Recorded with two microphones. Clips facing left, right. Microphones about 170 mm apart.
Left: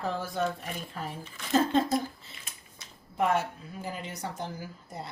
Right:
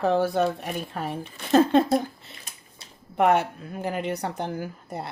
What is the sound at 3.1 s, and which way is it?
Speech, 65° right (ahead or behind).